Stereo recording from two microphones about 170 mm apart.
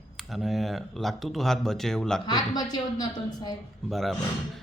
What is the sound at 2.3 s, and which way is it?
Speech, 25° left (ahead or behind).